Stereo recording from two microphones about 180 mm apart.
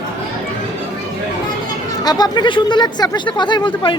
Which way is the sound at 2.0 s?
20° left (ahead or behind).